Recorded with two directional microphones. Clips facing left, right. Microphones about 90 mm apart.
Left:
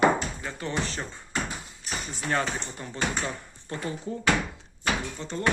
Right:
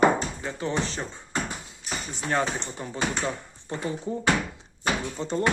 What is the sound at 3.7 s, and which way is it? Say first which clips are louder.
Speech: right 2 dB; 25° right (ahead or behind).